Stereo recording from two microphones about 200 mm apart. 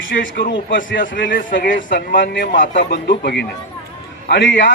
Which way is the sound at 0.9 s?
65° left (ahead or behind).